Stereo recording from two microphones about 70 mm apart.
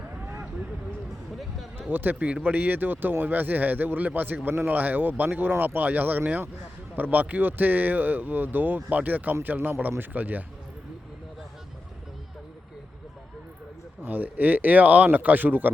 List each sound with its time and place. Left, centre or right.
1.4 s speech: centre
1.9 s speech: right
14.0 s speech: right